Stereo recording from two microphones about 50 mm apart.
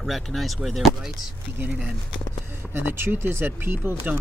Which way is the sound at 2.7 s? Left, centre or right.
Right.